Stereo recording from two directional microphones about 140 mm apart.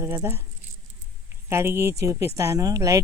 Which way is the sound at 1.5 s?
20° right (ahead or behind).